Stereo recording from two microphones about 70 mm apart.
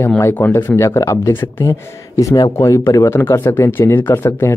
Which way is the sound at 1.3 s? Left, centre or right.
Left.